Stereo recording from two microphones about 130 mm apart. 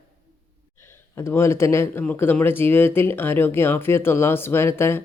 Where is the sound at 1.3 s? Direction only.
20° left (ahead or behind).